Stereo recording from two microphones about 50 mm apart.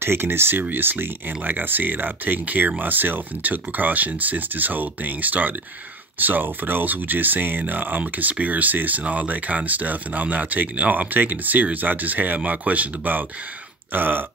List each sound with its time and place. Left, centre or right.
0.0 s speech: right